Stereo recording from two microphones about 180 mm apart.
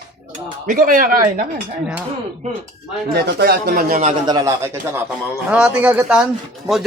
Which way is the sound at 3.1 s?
65° right (ahead or behind).